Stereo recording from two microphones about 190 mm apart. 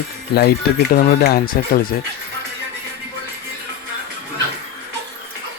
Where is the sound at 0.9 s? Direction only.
50° left (ahead or behind).